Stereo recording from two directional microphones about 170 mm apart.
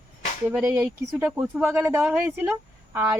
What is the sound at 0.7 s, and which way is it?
Speech, 15° right (ahead or behind).